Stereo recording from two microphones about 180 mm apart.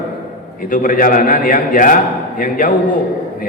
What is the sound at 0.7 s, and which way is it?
A man's voice, 50° left (ahead or behind).